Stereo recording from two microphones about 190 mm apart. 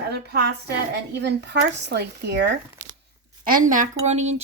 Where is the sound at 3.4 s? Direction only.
45° right (ahead or behind).